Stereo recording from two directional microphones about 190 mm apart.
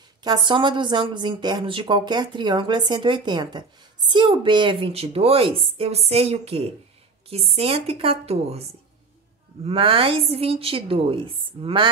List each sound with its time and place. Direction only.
0.2 s a woman's voice: 20° right (ahead or behind)
9.7 s speech: 30° right (ahead or behind)